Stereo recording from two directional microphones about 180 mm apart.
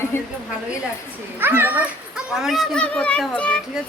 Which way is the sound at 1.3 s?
10° right (ahead or behind).